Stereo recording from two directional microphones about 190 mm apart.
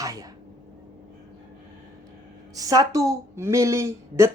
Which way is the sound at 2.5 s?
20° right (ahead or behind).